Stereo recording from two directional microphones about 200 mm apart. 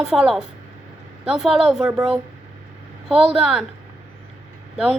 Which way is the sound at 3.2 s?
30° right (ahead or behind).